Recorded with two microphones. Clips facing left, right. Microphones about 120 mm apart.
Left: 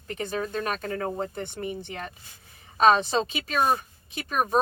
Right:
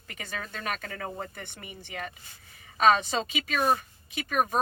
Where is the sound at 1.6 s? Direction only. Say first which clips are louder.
Left 4 dB; 40° left (ahead or behind).